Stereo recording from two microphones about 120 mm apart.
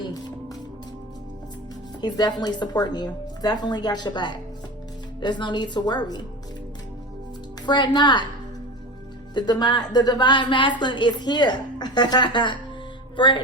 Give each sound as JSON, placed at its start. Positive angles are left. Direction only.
{"t": 0.0, "sound": "music", "side_deg": 35}
{"t": 2.0, "sound": "a woman's voice", "side_deg": 35}
{"t": 7.6, "sound": "a woman's voice", "side_deg": 40}
{"t": 9.3, "sound": "a woman's voice", "side_deg": 35}
{"t": 13.1, "sound": "music", "side_deg": 40}